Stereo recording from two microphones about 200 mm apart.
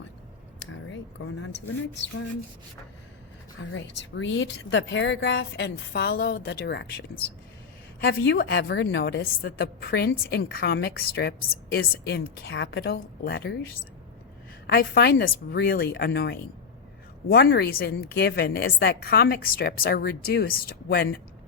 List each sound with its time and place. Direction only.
0.7 s speech: 80° left
3.6 s a woman's voice: 70° left (ahead or behind)
8.0 s a woman's voice: 55° left (ahead or behind)
14.7 s a woman's voice: 50° left (ahead or behind)